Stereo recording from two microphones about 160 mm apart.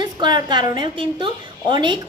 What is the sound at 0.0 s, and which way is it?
A woman's voice, 30° right (ahead or behind).